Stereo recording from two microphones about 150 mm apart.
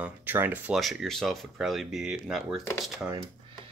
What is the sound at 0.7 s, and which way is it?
Speech, centre (ahead or behind).